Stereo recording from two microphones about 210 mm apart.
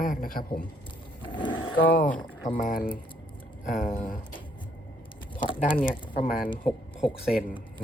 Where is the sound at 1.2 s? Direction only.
20° left (ahead or behind).